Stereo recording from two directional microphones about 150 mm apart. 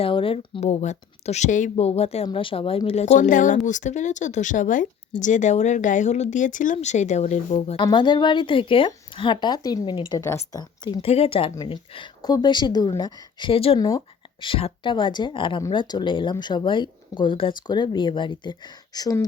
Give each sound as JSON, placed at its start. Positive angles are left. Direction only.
{"t": 0.0, "sound": "speech", "side_deg": 35}
{"t": 1.7, "sound": "speech", "side_deg": 40}
{"t": 7.6, "sound": "speech", "side_deg": 40}
{"t": 7.9, "sound": "speech", "side_deg": 30}
{"t": 11.0, "sound": "speech", "side_deg": 40}
{"t": 13.5, "sound": "speech", "side_deg": 40}
{"t": 13.7, "sound": "speech", "side_deg": 25}
{"t": 14.4, "sound": "speech", "side_deg": 35}